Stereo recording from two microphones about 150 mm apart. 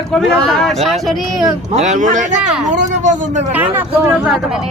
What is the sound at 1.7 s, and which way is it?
Speech, 50° right (ahead or behind).